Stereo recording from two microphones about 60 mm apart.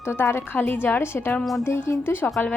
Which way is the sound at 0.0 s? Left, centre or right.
Left.